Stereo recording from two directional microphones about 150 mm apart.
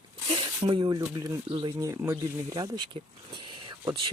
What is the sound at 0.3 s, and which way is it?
Speech, 35° right (ahead or behind).